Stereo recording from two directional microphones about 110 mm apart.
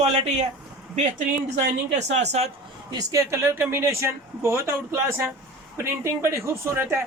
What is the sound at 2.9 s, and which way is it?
Speech, 35° right (ahead or behind).